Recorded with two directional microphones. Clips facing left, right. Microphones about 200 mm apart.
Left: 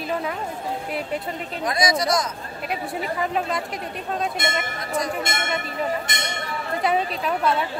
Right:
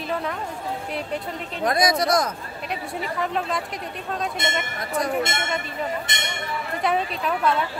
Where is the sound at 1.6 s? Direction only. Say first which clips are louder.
Right 2 dB; 55° right (ahead or behind).